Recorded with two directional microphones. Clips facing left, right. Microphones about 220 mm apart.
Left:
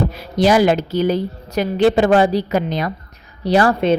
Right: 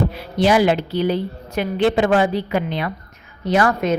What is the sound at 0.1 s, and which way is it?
A woman's voice, 40° left (ahead or behind).